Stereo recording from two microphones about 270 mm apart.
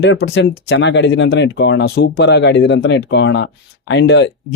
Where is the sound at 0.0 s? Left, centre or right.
Left.